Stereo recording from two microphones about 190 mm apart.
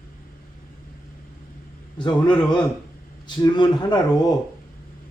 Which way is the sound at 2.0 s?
25° left (ahead or behind).